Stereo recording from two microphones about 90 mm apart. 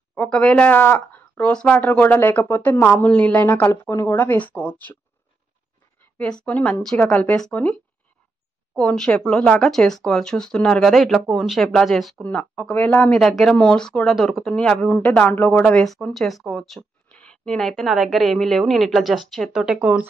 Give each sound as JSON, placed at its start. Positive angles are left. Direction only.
{"t": 0.1, "sound": "speech", "side_deg": 15}
{"t": 6.1, "sound": "speech", "side_deg": 10}
{"t": 7.1, "sound": "speech", "side_deg": 15}
{"t": 8.9, "sound": "speech", "side_deg": 10}
{"t": 12.2, "sound": "speech", "side_deg": 15}
{"t": 13.2, "sound": "speech", "side_deg": 5}
{"t": 15.6, "sound": "speech", "side_deg": 5}